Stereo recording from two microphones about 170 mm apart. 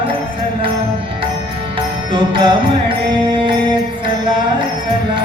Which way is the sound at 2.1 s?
30° right (ahead or behind).